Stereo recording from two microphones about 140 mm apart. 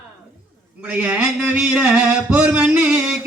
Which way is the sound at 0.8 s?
10° right (ahead or behind).